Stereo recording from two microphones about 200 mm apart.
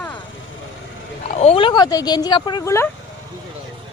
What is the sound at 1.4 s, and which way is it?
Speech, 30° left (ahead or behind).